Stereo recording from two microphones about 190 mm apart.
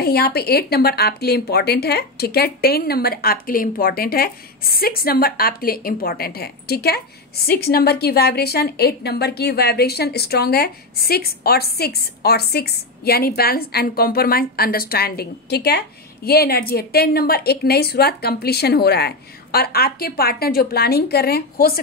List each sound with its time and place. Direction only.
0.0 s a woman's voice: 55° left (ahead or behind)